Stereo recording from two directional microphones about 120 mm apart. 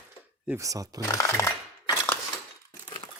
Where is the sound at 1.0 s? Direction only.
25° left (ahead or behind).